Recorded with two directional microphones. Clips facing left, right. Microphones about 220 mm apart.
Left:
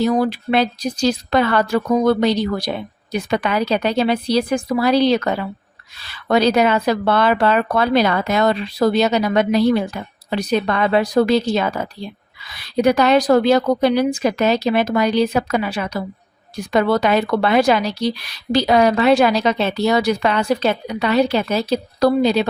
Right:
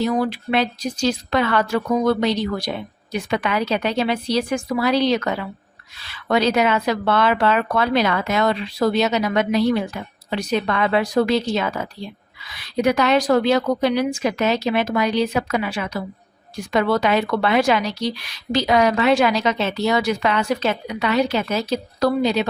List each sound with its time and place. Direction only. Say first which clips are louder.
0.0 s speech: left 3 dB; 40° left (ahead or behind)
12.7 s speech: left 3 dB; 35° left (ahead or behind)